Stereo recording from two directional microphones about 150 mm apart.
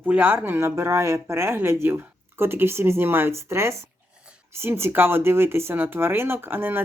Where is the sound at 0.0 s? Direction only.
10° right (ahead or behind).